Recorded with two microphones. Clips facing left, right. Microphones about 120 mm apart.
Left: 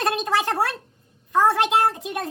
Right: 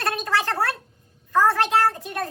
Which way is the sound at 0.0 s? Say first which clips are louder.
Left 2 dB; 20° left (ahead or behind).